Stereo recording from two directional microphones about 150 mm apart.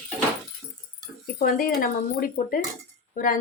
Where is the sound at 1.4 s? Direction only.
75° left (ahead or behind).